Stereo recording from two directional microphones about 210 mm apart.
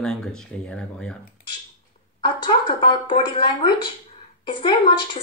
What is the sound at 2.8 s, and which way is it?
Speech, 20° left (ahead or behind).